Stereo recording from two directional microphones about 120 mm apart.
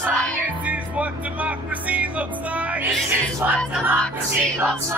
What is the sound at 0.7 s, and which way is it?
Music, 10° right (ahead or behind).